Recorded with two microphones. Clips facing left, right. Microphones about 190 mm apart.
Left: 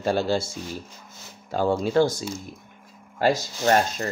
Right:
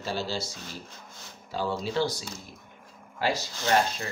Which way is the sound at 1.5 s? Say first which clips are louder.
Left 8 dB; 50° left (ahead or behind).